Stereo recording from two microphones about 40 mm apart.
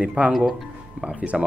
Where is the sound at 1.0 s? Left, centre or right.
Right.